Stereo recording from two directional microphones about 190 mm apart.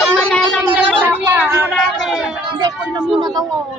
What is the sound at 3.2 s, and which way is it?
Speech, 20° right (ahead or behind).